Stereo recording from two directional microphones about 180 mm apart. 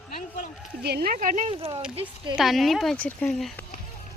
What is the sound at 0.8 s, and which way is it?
Speech, 60° right (ahead or behind).